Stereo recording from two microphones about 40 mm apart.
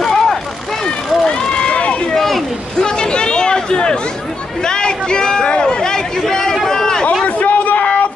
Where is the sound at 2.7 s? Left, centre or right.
Centre.